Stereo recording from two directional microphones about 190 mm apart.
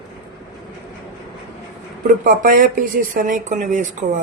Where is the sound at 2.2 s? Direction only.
45° right (ahead or behind).